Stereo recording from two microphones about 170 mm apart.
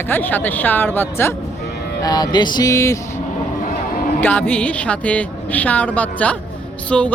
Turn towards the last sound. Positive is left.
turn(degrees=5)  # may be behind; listen again after turning